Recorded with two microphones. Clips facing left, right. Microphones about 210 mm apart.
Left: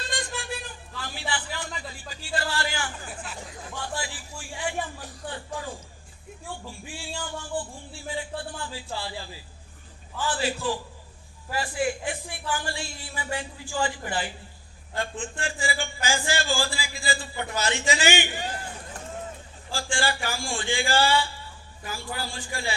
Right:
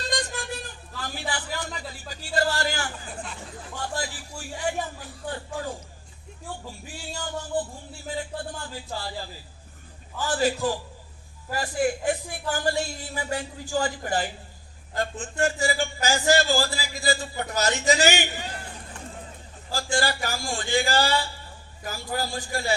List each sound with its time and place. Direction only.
0.1 s a sound: 40° right (ahead or behind)
3.9 s speech: 40° right (ahead or behind)
6.7 s a man's voice: 40° right (ahead or behind)
19.7 s speech: 40° right (ahead or behind)